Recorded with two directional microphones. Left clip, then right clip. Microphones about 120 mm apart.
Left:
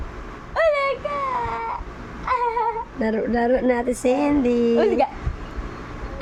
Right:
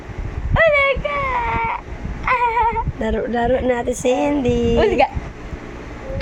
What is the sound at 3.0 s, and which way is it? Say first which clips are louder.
Speech: even; 25° left (ahead or behind).